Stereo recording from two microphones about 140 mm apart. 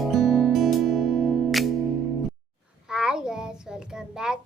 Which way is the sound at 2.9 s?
5° right (ahead or behind).